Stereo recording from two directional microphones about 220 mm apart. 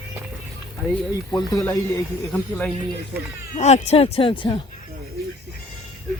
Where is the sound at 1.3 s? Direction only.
15° left (ahead or behind).